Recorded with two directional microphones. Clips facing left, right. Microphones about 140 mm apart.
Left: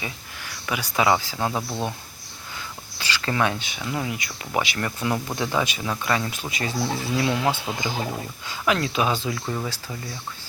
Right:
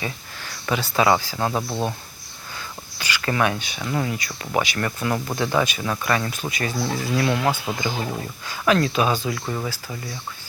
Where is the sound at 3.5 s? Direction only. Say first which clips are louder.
Right 3 dB; 20° left (ahead or behind).